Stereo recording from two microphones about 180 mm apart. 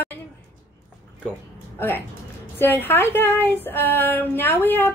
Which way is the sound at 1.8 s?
10° left (ahead or behind).